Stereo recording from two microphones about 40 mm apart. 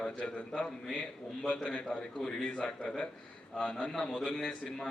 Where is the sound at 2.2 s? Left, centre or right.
Centre.